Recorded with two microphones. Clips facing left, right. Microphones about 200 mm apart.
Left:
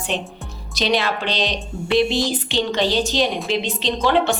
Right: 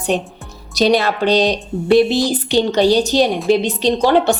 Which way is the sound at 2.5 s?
40° right (ahead or behind).